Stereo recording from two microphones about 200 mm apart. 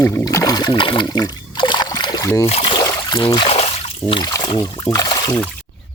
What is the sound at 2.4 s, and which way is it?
Speech, 30° left (ahead or behind).